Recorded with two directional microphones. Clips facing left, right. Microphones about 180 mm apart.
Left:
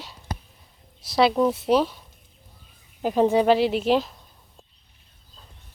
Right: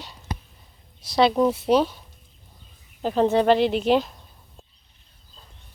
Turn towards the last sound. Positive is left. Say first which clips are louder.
# right 1 dB
turn(degrees=0)  # may be behind; listen again after turning